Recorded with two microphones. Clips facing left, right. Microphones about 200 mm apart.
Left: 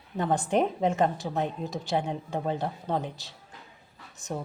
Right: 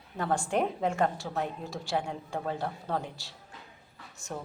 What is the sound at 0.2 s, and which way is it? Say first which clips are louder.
A woman's voice: left 3 dB; 20° left (ahead or behind).